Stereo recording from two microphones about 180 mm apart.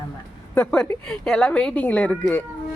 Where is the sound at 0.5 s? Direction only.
5° left (ahead or behind).